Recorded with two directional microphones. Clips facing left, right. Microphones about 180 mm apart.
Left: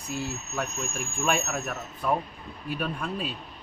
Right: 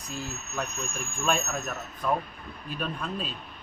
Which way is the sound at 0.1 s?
10° left (ahead or behind).